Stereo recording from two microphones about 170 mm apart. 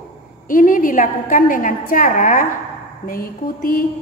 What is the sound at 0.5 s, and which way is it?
A woman's voice, 55° left (ahead or behind).